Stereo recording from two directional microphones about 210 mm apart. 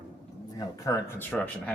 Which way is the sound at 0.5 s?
15° left (ahead or behind).